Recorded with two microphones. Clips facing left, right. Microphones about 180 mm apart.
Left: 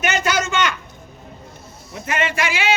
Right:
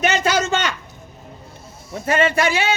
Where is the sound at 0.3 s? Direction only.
35° right (ahead or behind).